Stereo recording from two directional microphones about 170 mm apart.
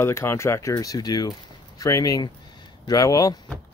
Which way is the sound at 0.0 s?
15° left (ahead or behind).